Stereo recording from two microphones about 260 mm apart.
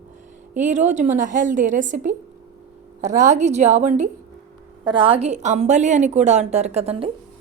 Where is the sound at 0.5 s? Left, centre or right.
Right.